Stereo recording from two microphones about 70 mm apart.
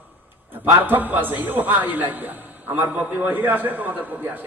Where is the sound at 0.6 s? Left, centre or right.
Right.